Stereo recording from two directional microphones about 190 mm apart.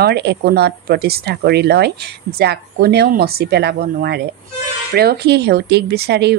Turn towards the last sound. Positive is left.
turn(degrees=-60)  # may be behind; listen again after turning